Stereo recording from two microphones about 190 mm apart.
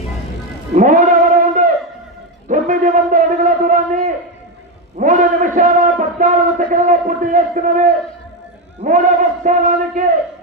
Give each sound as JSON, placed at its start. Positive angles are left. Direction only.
{"t": 0.7, "sound": "sheep", "side_deg": -40}
{"t": 2.5, "sound": "a sound", "side_deg": -45}
{"t": 4.9, "sound": "a man's voice", "side_deg": -45}